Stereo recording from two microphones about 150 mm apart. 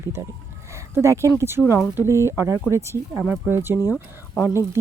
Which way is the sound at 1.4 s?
15° right (ahead or behind).